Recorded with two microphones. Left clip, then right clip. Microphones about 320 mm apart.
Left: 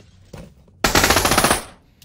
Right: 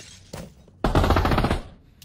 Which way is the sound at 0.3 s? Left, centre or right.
Centre.